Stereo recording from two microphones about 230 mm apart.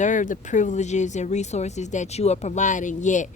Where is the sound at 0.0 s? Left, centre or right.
Left.